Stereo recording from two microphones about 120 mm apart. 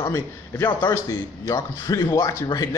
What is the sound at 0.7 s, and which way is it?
Speech, 35° left (ahead or behind).